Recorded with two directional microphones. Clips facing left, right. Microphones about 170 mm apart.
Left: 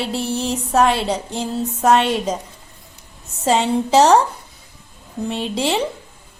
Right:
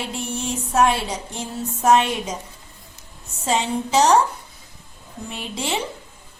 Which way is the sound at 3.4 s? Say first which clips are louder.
Left 5 dB; 35° left (ahead or behind).